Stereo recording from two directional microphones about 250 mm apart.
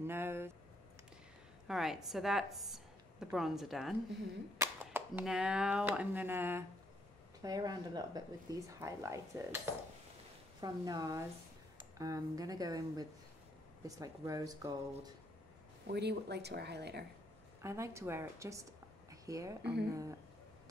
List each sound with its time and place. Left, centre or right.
0.0 s a sound: centre
1.7 s a woman's voice: centre
10.6 s speech: centre
15.9 s speech: right
17.6 s a woman's voice: centre
19.6 s speech: right
19.9 s speech: centre